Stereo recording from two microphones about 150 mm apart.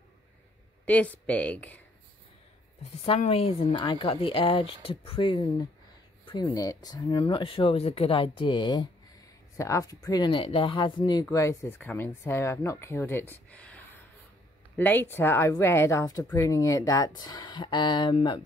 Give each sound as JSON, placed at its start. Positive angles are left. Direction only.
{"t": 0.8, "sound": "speech", "side_deg": 10}
{"t": 3.1, "sound": "speech", "side_deg": 40}